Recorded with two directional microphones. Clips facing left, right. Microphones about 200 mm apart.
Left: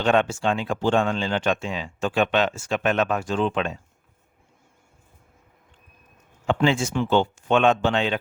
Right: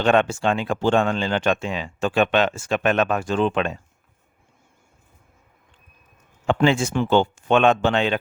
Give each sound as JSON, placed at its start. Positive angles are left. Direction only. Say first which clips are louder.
{"t": 0.0, "sound": "speech", "louder": "right 2 dB", "side_deg": -60}
{"t": 6.5, "sound": "speech", "louder": "right 2 dB", "side_deg": -55}